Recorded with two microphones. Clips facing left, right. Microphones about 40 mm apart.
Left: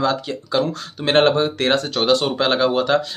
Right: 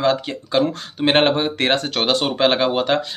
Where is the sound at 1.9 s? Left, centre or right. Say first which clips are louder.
Left 2 dB; right.